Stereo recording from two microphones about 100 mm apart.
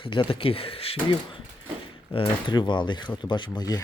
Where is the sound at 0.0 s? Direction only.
55° left (ahead or behind).